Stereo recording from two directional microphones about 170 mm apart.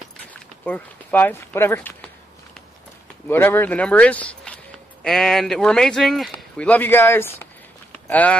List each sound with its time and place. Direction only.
0.3 s speech: 10° left (ahead or behind)
3.3 s speech: 15° left (ahead or behind)